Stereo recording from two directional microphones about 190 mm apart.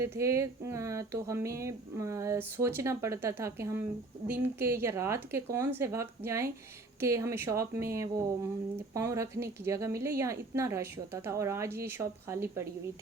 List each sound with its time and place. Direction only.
0.0 s speech: 15° right (ahead or behind)